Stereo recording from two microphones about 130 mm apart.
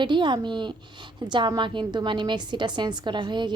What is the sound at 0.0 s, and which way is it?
A woman's voice, 35° right (ahead or behind).